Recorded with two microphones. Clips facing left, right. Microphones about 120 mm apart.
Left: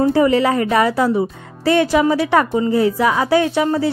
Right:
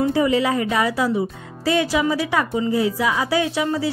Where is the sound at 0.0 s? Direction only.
55° left (ahead or behind).